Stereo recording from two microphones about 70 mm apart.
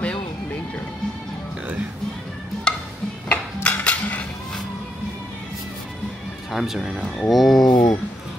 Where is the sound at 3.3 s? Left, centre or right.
Centre.